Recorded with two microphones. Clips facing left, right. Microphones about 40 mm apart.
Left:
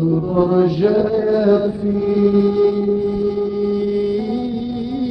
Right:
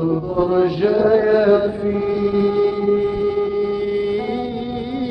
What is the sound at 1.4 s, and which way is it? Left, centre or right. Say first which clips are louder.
Chant: even; right.